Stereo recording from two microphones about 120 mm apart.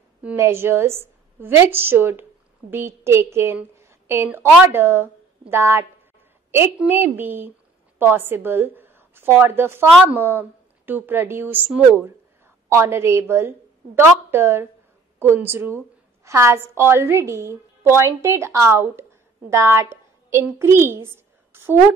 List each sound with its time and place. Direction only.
0.4 s a woman's voice: 20° right (ahead or behind)